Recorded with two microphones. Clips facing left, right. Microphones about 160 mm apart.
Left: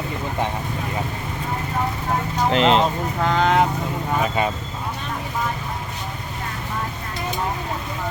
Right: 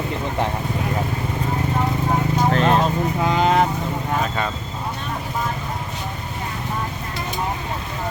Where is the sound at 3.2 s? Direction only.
5° right (ahead or behind).